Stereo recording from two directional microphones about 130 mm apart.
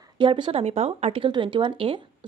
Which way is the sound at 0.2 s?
40° right (ahead or behind).